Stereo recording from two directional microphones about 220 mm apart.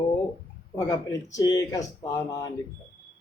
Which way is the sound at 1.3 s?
15° left (ahead or behind).